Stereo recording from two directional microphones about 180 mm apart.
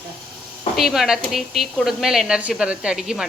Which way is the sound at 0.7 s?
Centre (ahead or behind).